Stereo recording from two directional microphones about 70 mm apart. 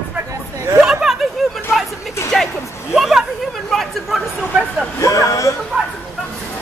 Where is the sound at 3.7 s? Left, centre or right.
Centre.